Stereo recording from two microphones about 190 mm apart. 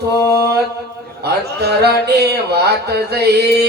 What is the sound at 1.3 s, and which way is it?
Speech, 60° right (ahead or behind).